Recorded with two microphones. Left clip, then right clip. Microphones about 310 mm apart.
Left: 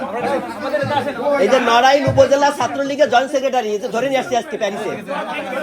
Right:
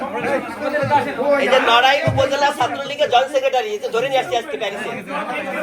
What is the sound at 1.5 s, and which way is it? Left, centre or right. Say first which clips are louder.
A man's voice: left 1 dB; left.